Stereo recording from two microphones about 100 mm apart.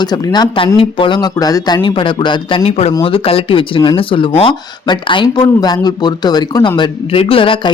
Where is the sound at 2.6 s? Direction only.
90° left.